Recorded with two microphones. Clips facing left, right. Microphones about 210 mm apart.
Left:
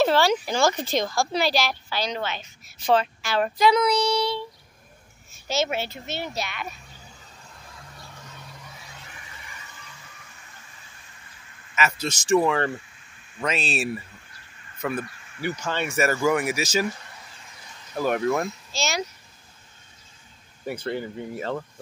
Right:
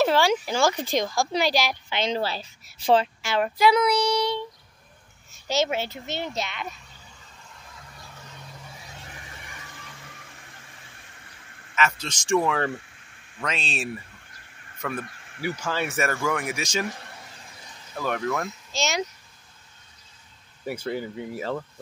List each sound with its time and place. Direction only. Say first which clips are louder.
0.0 s speech: left 1 dB; 10° right (ahead or behind)
3.4 s speech: even; 10° right (ahead or behind)
5.5 s a child's voice: right 1 dB; 15° right (ahead or behind)
9.4 s vehicle: right 2 dB; 55° right (ahead or behind)
11.7 s speech: left 1 dB; 5° left (ahead or behind)
15.0 s crow: left 1 dB; 55° right (ahead or behind)
15.4 s speech: even; 5° right (ahead or behind)
16.1 s speech: left 5 dB; 10° left (ahead or behind)
17.9 s speech: left 4 dB; 15° left (ahead or behind)
18.7 s speech: right 1 dB; 20° right (ahead or behind)
20.6 s speech: even; 10° right (ahead or behind)